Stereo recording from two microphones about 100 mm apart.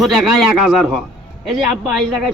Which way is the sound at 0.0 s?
Centre (ahead or behind).